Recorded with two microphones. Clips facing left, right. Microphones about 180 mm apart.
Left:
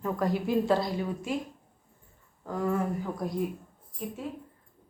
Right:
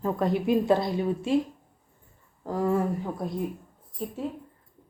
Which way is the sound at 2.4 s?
30° right (ahead or behind).